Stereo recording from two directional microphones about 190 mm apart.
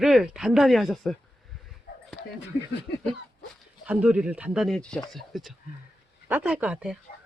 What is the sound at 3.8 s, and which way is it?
Speech, 5° right (ahead or behind).